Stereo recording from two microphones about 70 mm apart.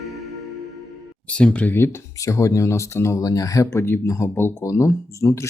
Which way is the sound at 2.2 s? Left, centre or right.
Left.